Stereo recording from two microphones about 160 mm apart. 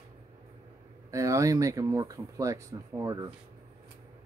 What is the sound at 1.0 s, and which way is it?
Speech, 20° right (ahead or behind).